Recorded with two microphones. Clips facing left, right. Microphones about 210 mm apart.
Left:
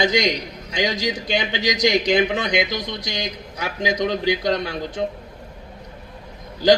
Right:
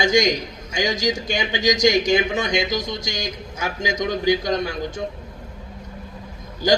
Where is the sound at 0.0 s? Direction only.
45° right (ahead or behind).